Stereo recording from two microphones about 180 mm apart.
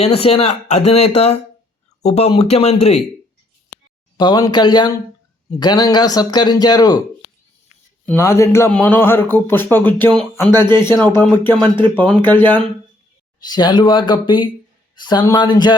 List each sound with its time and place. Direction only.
0.0 s speech: 35° left (ahead or behind)
4.2 s speech: 20° left (ahead or behind)
8.0 s speech: 15° left (ahead or behind)
13.4 s speech: 25° left (ahead or behind)